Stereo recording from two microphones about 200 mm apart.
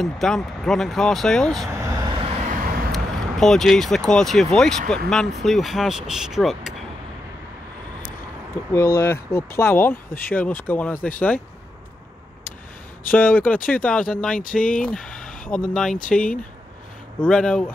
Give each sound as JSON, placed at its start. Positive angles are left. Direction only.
{"t": 0.0, "sound": "speech", "side_deg": 0}
{"t": 1.7, "sound": "vehicle", "side_deg": -15}
{"t": 2.9, "sound": "speech", "side_deg": 0}
{"t": 8.7, "sound": "speech", "side_deg": 10}
{"t": 13.1, "sound": "speech", "side_deg": 10}